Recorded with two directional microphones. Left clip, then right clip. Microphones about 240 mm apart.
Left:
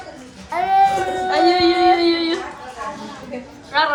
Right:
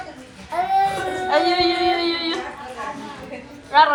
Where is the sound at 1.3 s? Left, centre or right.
Centre.